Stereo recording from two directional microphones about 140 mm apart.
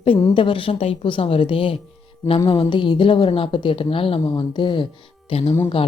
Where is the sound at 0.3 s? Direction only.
40° left (ahead or behind).